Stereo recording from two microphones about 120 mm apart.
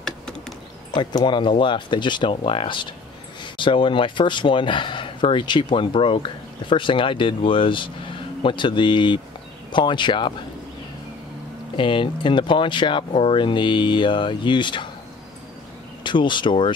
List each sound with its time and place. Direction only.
0.9 s speech: 40° left (ahead or behind)
11.7 s speech: 45° left (ahead or behind)
16.0 s speech: 40° left (ahead or behind)